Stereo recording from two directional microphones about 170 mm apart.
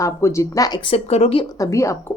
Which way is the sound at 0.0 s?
15° left (ahead or behind).